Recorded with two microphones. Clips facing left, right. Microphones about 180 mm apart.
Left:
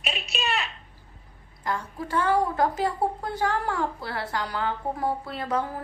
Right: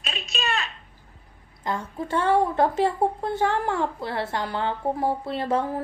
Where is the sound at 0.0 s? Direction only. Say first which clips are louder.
Even; 20° left (ahead or behind).